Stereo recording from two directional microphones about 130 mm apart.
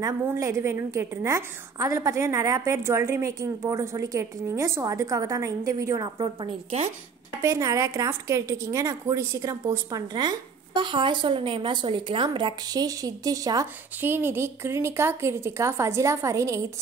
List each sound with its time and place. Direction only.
0.0 s a woman's voice: 25° right (ahead or behind); by 6.8 s 40° right (ahead or behind)
7.4 s a woman's voice: 25° right (ahead or behind)